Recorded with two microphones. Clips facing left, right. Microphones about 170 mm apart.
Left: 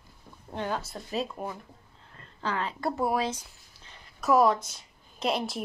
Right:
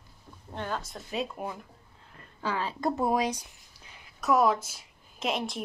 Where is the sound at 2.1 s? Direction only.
10° right (ahead or behind).